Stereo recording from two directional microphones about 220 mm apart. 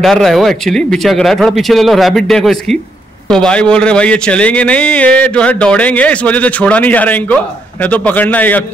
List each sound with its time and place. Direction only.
0.0 s a man's voice: centre (ahead or behind)